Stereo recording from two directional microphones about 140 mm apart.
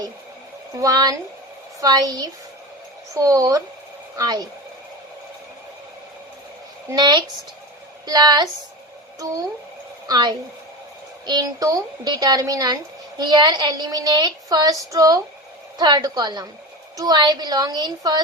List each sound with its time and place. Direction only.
0.8 s speech: 25° right (ahead or behind)
6.9 s speech: 30° right (ahead or behind)
10.1 s speech: 30° right (ahead or behind)